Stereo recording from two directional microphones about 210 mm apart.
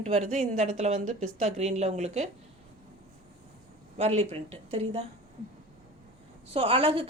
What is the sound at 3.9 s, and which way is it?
A woman's voice, 30° right (ahead or behind).